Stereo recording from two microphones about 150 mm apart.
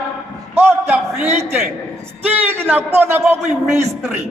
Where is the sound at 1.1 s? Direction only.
45° right (ahead or behind).